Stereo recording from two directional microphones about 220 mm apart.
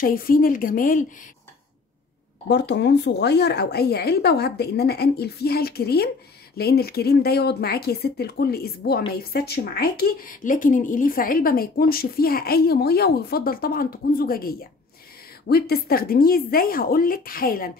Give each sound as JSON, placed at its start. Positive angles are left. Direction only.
{"t": 0.0, "sound": "speech", "side_deg": 40}
{"t": 2.4, "sound": "speech", "side_deg": 50}